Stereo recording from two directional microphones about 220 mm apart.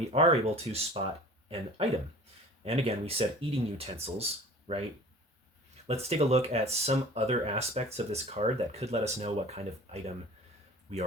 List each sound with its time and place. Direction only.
0.1 s speech: 25° right (ahead or behind)
5.9 s speech: 30° right (ahead or behind)